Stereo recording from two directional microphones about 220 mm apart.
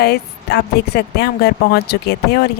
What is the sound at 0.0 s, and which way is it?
A woman's voice, 45° left (ahead or behind).